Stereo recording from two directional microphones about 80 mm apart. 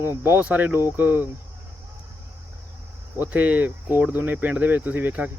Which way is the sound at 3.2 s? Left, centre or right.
Centre.